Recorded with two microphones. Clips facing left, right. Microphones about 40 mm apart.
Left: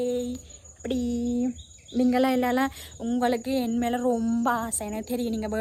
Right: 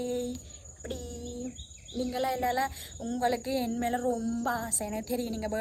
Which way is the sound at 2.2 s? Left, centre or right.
Left.